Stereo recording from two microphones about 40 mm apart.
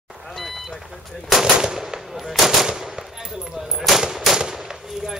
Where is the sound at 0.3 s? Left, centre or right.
Centre.